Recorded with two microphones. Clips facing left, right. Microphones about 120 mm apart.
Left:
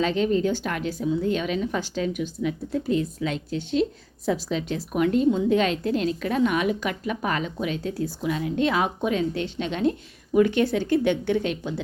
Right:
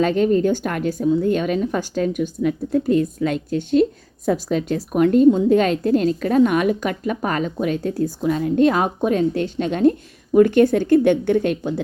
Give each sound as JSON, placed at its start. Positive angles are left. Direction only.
{"t": 0.0, "sound": "a woman's voice", "side_deg": -50}